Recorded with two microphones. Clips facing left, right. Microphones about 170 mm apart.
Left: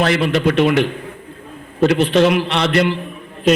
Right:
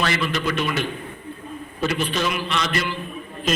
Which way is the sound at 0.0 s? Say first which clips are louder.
Left 8 dB; 65° left (ahead or behind).